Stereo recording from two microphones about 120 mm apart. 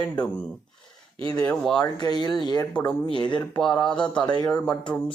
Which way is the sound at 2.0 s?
35° left (ahead or behind).